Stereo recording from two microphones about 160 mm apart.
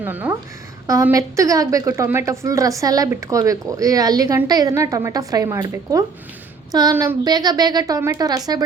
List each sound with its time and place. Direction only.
0.0 s a woman's voice: 10° right (ahead or behind)
6.9 s a woman's voice: 15° right (ahead or behind)
7.3 s speech: 25° right (ahead or behind)